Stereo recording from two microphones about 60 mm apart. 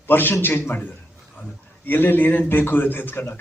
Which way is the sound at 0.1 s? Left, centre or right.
Left.